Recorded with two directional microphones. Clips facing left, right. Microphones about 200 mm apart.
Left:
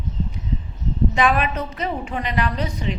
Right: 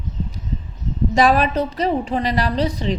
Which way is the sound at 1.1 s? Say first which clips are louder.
Right 6 dB; 35° right (ahead or behind).